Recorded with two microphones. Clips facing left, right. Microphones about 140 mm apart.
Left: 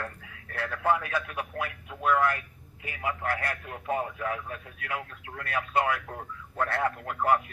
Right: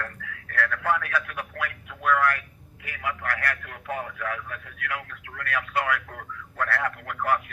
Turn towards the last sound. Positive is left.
turn(degrees=25)  # may be behind; listen again after turning